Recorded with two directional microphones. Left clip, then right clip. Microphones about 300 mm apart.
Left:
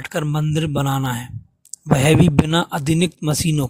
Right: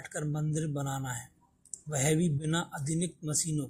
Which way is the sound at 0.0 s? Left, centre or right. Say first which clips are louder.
Left 13 dB; left.